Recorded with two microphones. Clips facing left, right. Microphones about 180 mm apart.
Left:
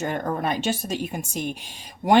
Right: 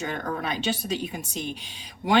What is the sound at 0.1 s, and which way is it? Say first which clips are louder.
Speech: left 4 dB; 50° left (ahead or behind).